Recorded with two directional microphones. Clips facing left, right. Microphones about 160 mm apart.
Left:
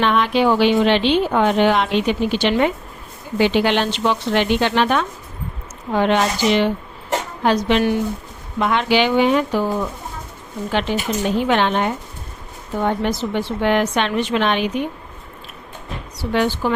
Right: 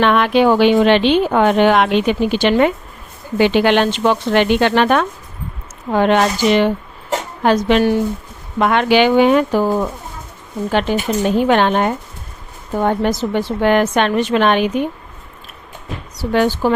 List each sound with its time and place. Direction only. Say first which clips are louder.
0.0 s a woman's voice: right 4 dB; 60° right (ahead or behind)
16.3 s a woman's voice: right 4 dB; 45° right (ahead or behind)